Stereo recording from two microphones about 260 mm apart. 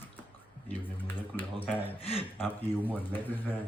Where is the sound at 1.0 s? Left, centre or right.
Centre.